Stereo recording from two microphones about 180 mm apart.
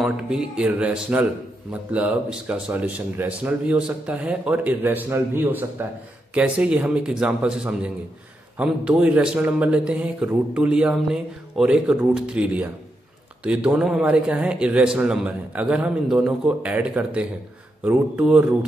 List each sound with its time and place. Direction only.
0.0 s a man's voice: 5° right (ahead or behind)